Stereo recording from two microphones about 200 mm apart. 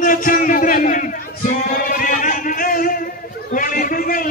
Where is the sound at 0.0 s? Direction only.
45° left (ahead or behind).